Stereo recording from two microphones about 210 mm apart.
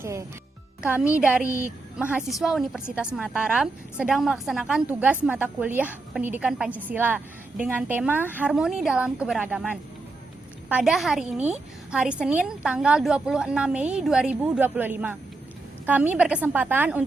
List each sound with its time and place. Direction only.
0.0 s a woman's voice: 15° right (ahead or behind)
10.7 s a woman's voice: 5° right (ahead or behind)